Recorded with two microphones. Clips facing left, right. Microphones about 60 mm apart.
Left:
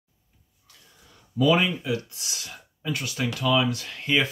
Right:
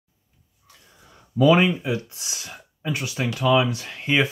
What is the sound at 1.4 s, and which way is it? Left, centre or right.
Speech, right.